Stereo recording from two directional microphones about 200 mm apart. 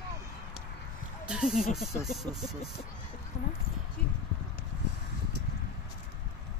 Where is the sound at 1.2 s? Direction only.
5° right (ahead or behind).